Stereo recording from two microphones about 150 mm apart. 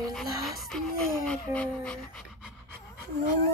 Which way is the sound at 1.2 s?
5° left (ahead or behind).